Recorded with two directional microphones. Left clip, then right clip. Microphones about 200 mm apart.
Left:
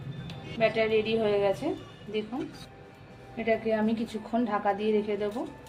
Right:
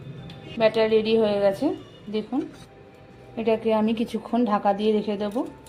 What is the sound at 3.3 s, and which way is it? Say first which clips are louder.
A woman's voice: right 5 dB; 45° right (ahead or behind).